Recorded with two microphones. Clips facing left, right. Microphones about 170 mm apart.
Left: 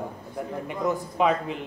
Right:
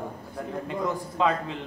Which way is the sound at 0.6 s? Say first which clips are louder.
Left 3 dB; 15° left (ahead or behind).